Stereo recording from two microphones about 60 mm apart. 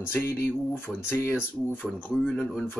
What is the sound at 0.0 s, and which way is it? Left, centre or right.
Speech, left.